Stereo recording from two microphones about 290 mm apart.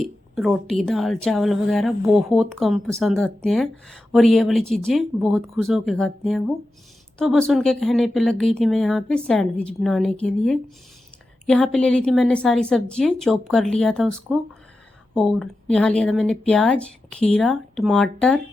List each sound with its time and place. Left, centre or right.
0.0 s a woman's voice: centre